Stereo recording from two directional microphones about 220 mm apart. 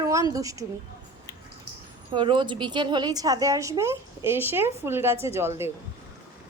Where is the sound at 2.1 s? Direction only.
20° right (ahead or behind).